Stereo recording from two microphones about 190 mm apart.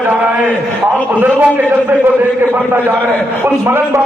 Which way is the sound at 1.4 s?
10° right (ahead or behind).